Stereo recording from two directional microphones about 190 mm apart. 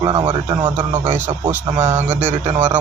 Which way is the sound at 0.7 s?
10° right (ahead or behind).